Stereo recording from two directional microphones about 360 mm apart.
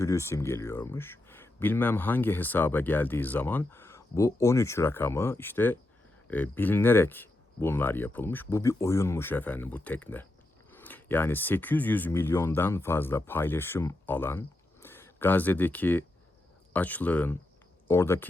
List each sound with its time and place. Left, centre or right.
0.0 s speech: centre